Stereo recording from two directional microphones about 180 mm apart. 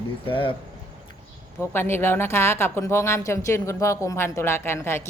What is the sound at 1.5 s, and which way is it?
Speech, 15° left (ahead or behind).